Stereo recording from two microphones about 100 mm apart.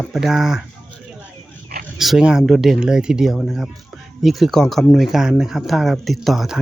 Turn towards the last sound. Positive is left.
turn(degrees=0)  # may be behind; listen again after turning